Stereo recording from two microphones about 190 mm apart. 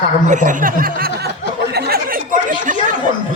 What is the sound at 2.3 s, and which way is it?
Chatter, 45° right (ahead or behind).